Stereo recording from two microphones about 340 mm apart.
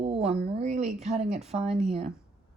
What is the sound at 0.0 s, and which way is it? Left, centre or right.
A woman's voice, centre.